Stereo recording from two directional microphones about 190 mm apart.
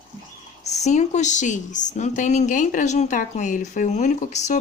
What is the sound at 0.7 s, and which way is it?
Speech, 35° left (ahead or behind).